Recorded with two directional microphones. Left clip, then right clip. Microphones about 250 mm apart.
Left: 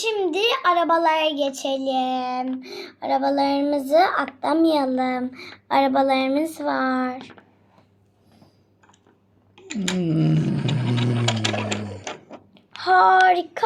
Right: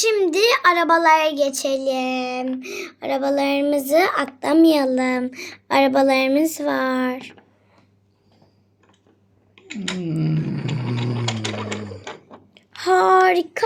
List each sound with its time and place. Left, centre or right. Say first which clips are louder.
0.3 s a woman's voice: right 2 dB; right
9.6 s speech: left 2 dB; left
10.4 s a sound: left 2 dB; left; by 12.4 s centre
12.8 s a woman's voice: even; right